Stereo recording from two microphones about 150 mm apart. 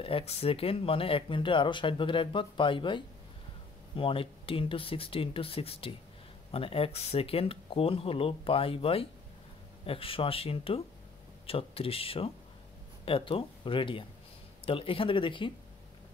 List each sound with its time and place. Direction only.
0.0 s speech: 40° left (ahead or behind)